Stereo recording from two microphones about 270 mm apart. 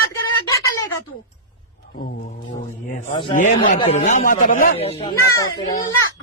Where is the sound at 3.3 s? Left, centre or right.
Left.